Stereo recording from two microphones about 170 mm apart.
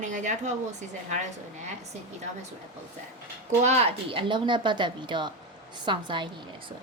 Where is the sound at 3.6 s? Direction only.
40° right (ahead or behind).